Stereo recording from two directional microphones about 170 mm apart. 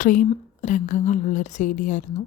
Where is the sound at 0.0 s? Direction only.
50° left (ahead or behind).